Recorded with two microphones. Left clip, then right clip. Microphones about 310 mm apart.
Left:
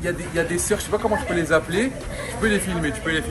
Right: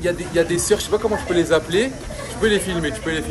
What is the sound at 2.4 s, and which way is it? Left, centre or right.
Speech, right.